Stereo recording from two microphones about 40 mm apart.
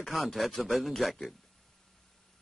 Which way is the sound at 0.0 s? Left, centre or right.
Centre.